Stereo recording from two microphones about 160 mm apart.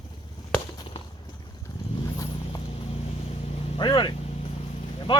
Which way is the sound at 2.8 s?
40° left (ahead or behind).